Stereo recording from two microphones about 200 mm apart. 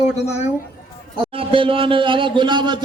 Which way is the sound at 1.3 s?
30° right (ahead or behind).